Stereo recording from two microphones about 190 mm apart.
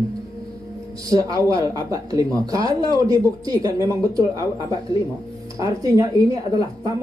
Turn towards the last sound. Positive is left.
turn(degrees=-20)  # may be behind; listen again after turning